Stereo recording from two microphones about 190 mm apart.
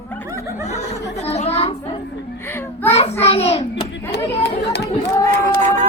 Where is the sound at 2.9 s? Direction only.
30° left (ahead or behind).